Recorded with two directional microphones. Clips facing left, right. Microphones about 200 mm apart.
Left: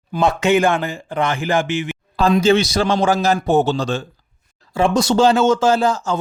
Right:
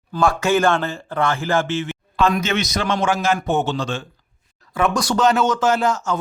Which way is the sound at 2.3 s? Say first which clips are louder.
Left 7 dB; 30° left (ahead or behind).